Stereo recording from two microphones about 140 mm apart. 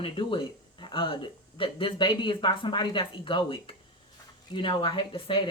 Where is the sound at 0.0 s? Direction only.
40° left (ahead or behind).